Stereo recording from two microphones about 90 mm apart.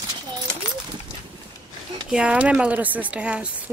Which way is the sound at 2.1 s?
10° right (ahead or behind).